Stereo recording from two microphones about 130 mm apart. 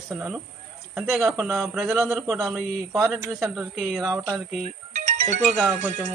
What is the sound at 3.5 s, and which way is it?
Speech, centre (ahead or behind).